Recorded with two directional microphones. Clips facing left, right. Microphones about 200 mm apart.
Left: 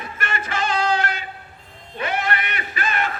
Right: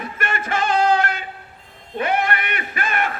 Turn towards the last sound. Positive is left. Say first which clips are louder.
# right 1 dB
turn(degrees=-55)  # may be behind; listen again after turning